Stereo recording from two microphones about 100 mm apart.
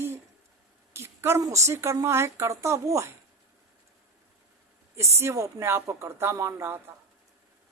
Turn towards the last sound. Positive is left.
turn(degrees=-25)  # may be behind; listen again after turning